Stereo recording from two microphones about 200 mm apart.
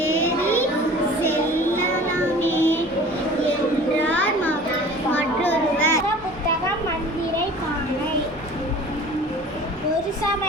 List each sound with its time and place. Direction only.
0.0 s child singing: 10° left (ahead or behind)
2.4 s child singing: 10° left (ahead or behind)
4.0 s children playing: 10° left (ahead or behind)